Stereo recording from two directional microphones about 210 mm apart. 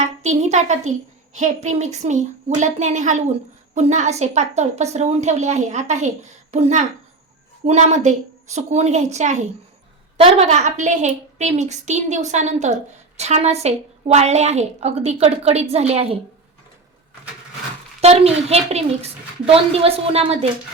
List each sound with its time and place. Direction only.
0.0 s a woman's voice: 30° right (ahead or behind)
18.0 s a woman's voice: 30° right (ahead or behind)